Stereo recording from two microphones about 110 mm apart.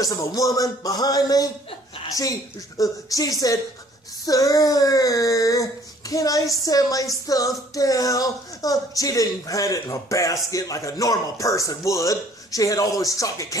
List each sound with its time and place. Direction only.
0.0 s speech: 30° left (ahead or behind)